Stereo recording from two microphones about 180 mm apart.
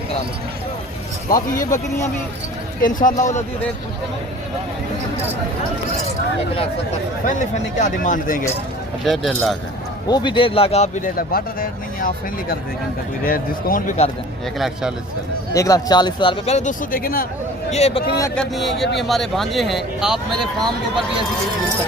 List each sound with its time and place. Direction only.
1.3 s speech: 50° left (ahead or behind)
2.8 s speech: 50° left (ahead or behind)
7.3 s speech: 45° left (ahead or behind)
9.0 s speech: centre (ahead or behind)
10.1 s a man's voice: 25° left (ahead or behind); by 14.1 s 40° left (ahead or behind)
14.6 s speech: 5° right (ahead or behind)
15.5 s speech: 20° left (ahead or behind)
16.5 s speech: 40° left (ahead or behind)
17.7 s a man's voice: 35° left (ahead or behind)
18.3 s speech: centre (ahead or behind)